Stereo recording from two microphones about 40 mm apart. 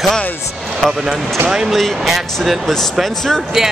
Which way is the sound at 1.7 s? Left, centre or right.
Centre.